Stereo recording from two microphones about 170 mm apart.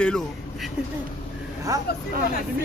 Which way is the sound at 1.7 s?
20° right (ahead or behind).